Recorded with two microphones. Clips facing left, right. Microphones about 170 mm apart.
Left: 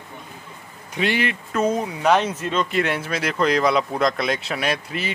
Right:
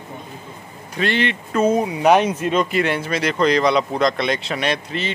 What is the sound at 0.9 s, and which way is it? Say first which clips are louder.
Speech: right 2 dB; 10° left (ahead or behind).